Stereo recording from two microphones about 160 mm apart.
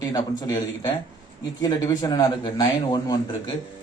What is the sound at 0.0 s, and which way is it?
A man's voice, 25° left (ahead or behind).